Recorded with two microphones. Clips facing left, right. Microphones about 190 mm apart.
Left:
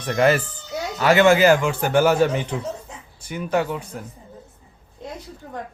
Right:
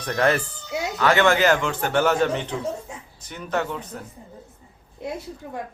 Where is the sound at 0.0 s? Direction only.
5° left (ahead or behind).